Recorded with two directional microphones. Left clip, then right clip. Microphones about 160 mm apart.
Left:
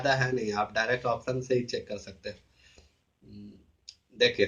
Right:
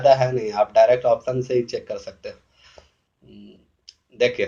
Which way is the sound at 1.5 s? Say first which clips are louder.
Right 8 dB; 20° right (ahead or behind).